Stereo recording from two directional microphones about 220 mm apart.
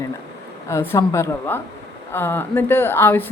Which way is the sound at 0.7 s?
10° left (ahead or behind).